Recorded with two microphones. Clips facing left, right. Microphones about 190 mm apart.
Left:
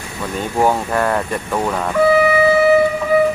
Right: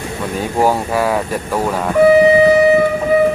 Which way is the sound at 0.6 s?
5° right (ahead or behind).